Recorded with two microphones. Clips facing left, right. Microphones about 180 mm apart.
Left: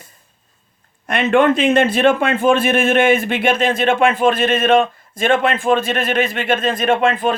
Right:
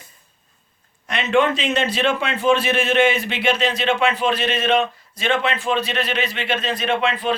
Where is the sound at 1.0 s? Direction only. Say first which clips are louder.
Left 5 dB; 55° left (ahead or behind).